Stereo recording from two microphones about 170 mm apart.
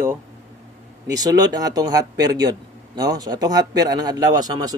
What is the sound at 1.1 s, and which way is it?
A man's voice, 20° right (ahead or behind).